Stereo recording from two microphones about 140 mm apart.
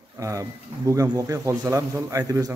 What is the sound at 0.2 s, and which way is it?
Speech, 25° right (ahead or behind).